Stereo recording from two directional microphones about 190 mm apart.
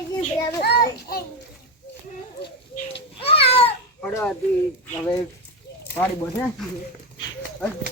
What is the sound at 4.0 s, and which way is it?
Speech, 5° left (ahead or behind).